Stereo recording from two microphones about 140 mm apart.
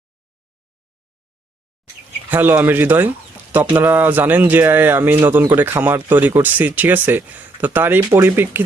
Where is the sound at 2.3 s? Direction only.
15° right (ahead or behind).